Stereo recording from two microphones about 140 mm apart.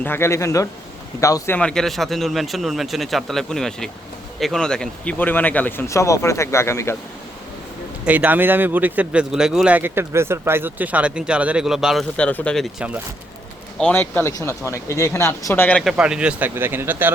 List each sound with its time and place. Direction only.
0.0 s speech: 15° left (ahead or behind)
1.5 s speech: 5° left (ahead or behind)
8.0 s a man's voice: 10° right (ahead or behind)
12.1 s speech: 10° left (ahead or behind)
13.7 s speech: 10° left (ahead or behind)
15.8 s a man's voice: 5° right (ahead or behind)